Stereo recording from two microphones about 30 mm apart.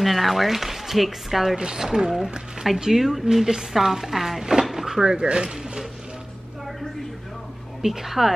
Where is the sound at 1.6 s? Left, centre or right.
Right.